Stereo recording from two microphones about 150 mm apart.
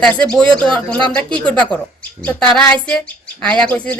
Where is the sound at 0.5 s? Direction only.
30° right (ahead or behind).